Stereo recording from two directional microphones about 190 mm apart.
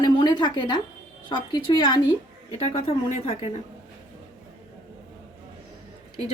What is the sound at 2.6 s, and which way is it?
Speech, 35° left (ahead or behind).